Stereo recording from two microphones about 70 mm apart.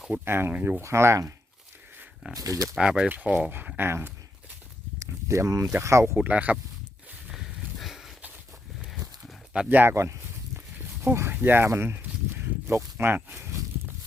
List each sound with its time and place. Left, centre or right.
0.1 s speech: right
2.3 s speech: right
2.7 s speech: centre
3.1 s speech: right
4.9 s a sound: right
5.7 s speech: right
6.1 s speech: right
7.3 s a sound: centre
9.6 s speech: right
9.9 s speech: right
11.0 s speech: right
11.7 s a sound: right